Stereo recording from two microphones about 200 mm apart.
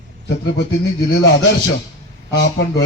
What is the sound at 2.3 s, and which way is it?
Speech, 60° left (ahead or behind).